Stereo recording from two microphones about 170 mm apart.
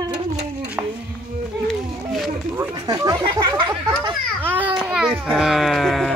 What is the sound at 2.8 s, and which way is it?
Chatter, 25° right (ahead or behind).